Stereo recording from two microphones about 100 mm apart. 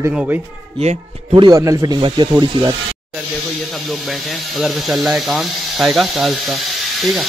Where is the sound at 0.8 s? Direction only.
90° right.